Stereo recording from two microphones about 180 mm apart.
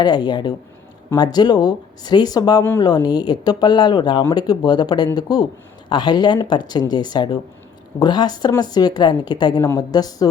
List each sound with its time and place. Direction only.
0.0 s a woman's voice: 25° left (ahead or behind)